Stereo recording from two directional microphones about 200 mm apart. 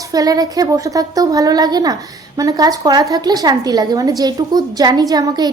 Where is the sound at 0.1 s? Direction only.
20° right (ahead or behind).